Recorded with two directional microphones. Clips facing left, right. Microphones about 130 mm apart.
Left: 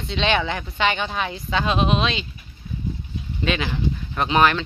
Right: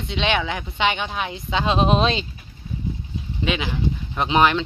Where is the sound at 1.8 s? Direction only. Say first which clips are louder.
Right 3 dB; 40° right (ahead or behind).